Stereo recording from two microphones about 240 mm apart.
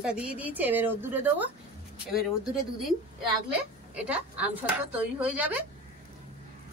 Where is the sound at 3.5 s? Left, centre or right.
Centre.